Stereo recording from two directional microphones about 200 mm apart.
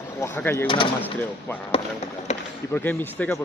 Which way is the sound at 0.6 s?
25° left (ahead or behind).